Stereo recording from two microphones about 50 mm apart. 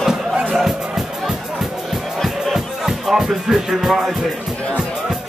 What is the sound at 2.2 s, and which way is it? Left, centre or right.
Music, centre.